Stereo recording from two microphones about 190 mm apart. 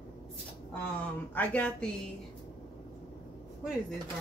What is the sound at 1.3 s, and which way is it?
Speech, 5° left (ahead or behind).